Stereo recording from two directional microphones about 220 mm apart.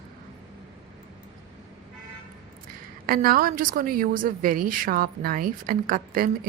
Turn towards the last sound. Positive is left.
turn(degrees=-40)  # may be behind; listen again after turning